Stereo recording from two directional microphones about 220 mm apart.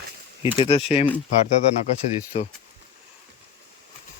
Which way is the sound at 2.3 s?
30° left (ahead or behind).